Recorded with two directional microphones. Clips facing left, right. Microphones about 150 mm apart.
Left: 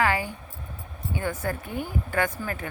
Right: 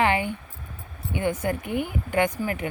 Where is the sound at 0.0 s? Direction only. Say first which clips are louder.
Right 2 dB; 25° right (ahead or behind).